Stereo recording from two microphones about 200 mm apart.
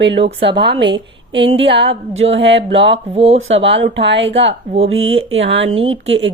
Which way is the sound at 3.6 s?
65° right (ahead or behind).